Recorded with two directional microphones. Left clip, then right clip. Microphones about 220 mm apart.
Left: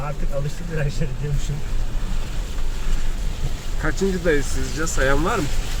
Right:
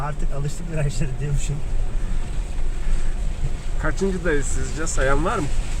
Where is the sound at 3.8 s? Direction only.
5° left (ahead or behind).